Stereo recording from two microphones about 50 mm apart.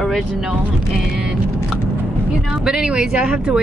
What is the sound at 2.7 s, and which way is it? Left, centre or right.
Speech, centre.